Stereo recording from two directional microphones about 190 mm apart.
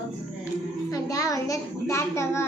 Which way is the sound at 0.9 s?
20° left (ahead or behind).